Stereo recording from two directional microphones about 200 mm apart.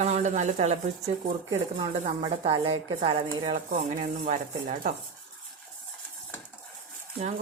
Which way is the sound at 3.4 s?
35° right (ahead or behind).